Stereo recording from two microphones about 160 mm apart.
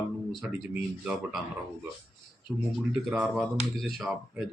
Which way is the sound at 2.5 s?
5° right (ahead or behind).